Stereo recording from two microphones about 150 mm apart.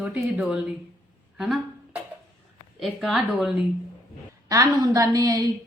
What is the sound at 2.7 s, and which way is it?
Speech, centre (ahead or behind).